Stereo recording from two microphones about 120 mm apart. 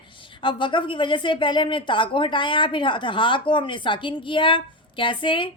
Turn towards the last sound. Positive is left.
turn(degrees=45)  # may be behind; listen again after turning